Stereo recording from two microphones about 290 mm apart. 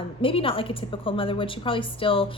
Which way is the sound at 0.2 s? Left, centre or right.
Centre.